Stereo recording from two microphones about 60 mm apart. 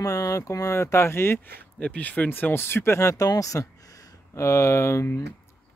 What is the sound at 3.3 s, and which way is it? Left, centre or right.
Speech, left.